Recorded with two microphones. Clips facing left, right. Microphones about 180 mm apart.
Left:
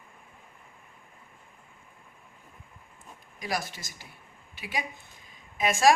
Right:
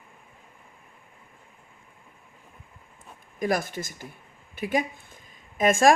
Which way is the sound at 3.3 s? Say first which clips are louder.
Right 7 dB; 50° right (ahead or behind).